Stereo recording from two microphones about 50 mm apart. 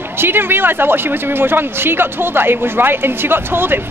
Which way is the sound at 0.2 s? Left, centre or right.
Right.